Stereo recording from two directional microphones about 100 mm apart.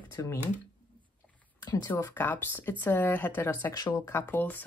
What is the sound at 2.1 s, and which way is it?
Speech, 20° left (ahead or behind).